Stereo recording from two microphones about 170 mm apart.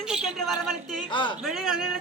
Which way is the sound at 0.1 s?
Centre (ahead or behind).